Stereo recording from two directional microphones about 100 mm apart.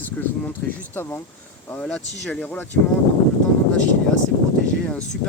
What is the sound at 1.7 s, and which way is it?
Speech, 10° left (ahead or behind).